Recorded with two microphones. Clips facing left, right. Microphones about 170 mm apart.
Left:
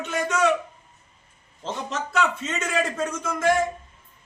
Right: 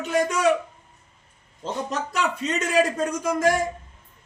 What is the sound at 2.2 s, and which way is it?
Speech, 35° right (ahead or behind).